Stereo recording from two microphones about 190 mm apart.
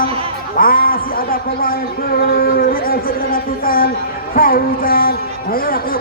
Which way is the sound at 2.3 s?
50° left (ahead or behind).